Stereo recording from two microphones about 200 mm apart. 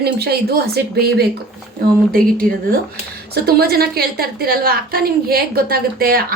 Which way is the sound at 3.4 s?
50° right (ahead or behind).